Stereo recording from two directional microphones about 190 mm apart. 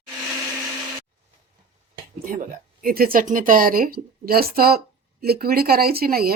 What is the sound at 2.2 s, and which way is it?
Speech, 45° right (ahead or behind).